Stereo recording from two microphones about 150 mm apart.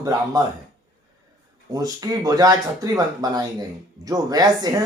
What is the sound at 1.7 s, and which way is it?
Speech, 25° right (ahead or behind).